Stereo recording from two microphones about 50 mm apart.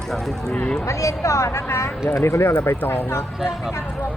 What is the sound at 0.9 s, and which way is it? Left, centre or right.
Speech, left.